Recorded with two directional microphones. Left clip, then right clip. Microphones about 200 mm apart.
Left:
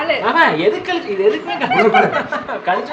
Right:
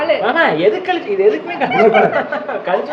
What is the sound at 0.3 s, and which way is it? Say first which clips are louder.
Speech: left 2 dB; 10° left (ahead or behind).